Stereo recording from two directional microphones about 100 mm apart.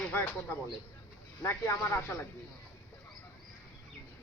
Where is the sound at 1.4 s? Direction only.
30° left (ahead or behind).